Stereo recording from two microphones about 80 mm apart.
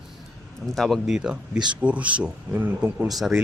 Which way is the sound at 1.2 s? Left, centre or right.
Centre.